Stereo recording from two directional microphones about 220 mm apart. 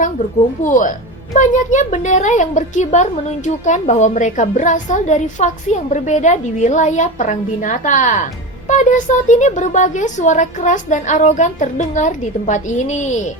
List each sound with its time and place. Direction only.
0.6 s a woman's voice: 35° left (ahead or behind)